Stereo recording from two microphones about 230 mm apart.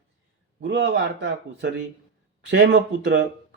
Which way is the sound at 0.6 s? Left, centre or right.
Right.